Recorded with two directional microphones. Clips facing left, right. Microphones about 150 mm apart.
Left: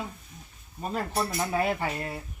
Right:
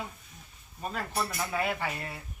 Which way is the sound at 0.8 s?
30° left (ahead or behind).